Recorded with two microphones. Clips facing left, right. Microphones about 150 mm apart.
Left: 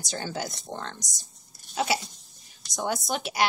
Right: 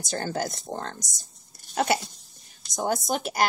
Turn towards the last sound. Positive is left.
turn(degrees=-45)  # may be behind; listen again after turning